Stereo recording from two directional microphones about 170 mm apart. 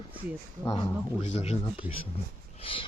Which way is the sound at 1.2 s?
40° left (ahead or behind).